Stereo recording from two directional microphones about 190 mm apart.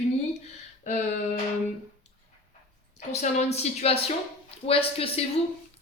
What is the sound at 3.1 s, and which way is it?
Speech, 35° left (ahead or behind).